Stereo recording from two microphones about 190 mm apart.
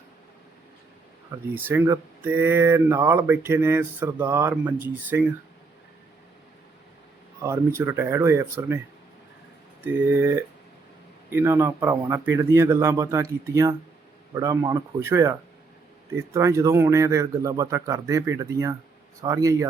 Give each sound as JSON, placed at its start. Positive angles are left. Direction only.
{"t": 1.5, "sound": "speech", "side_deg": -10}
{"t": 7.4, "sound": "speech", "side_deg": -15}
{"t": 9.8, "sound": "speech", "side_deg": -10}